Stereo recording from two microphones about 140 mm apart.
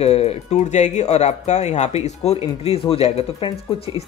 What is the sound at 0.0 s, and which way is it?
Speech, 50° left (ahead or behind).